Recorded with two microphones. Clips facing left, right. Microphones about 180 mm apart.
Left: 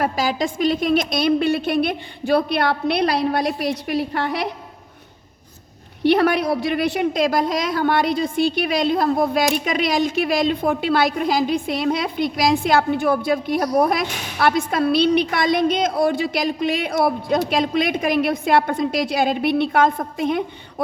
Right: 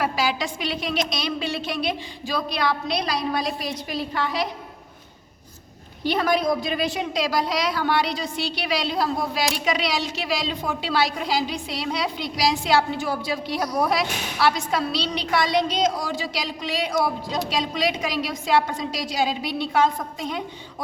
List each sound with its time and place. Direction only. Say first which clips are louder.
0.0 s a woman's voice: left 3 dB; 45° left (ahead or behind)
6.0 s a woman's voice: left 6 dB; 65° left (ahead or behind)